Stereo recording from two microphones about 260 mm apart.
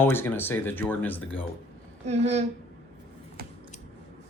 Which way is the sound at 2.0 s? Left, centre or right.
Right.